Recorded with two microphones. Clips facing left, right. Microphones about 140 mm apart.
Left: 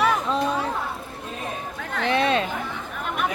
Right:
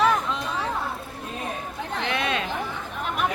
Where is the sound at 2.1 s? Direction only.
30° left (ahead or behind).